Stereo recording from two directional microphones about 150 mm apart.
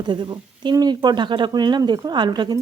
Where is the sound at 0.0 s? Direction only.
30° right (ahead or behind).